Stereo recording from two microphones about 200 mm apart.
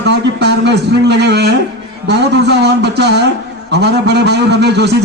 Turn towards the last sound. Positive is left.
turn(degrees=-55)  # may be behind; listen again after turning